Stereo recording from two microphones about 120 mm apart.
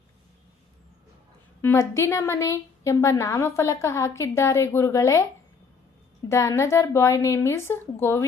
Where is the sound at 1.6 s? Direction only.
20° left (ahead or behind).